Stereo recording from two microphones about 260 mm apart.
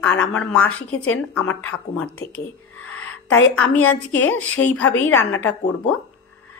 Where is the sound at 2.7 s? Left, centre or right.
Left.